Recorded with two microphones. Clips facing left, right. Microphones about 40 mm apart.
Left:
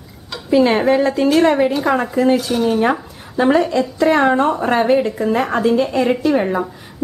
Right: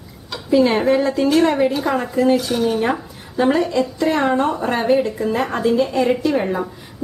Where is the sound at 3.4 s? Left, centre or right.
Centre.